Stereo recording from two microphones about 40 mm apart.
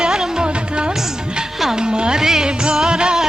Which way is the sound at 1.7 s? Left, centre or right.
Right.